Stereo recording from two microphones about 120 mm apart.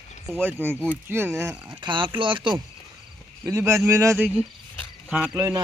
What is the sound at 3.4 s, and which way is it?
Speech, 25° right (ahead or behind).